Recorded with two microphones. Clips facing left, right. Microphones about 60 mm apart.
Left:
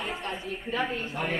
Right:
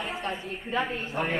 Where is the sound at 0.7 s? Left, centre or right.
Right.